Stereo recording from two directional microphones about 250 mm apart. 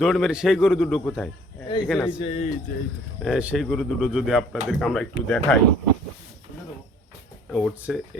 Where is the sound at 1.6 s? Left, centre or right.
Centre.